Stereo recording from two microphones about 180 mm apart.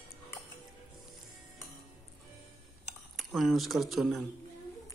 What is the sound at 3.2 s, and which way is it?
Speech, centre (ahead or behind).